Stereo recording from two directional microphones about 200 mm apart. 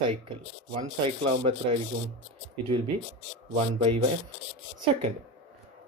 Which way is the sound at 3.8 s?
30° right (ahead or behind).